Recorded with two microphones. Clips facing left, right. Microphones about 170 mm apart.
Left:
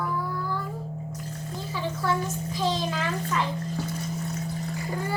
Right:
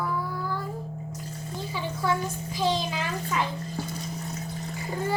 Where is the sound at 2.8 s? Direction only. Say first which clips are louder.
Left 2 dB; 10° right (ahead or behind).